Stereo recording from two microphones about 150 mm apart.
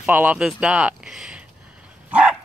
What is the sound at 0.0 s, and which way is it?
Speech, 10° right (ahead or behind).